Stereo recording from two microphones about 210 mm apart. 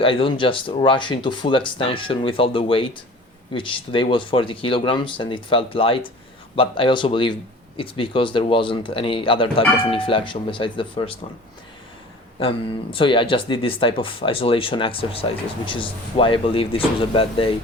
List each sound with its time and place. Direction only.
0.0 s speech: 25° left (ahead or behind)
12.4 s speech: 25° left (ahead or behind)